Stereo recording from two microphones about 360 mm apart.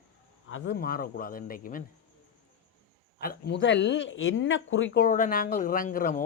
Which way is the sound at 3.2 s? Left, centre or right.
Left.